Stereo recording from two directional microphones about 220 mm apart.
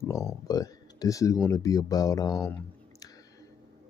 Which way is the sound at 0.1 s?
15° left (ahead or behind).